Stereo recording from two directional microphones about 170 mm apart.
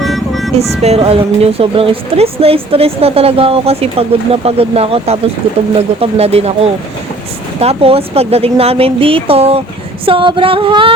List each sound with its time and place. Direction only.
0.0 s music: centre (ahead or behind)
0.8 s a woman's voice: 35° right (ahead or behind)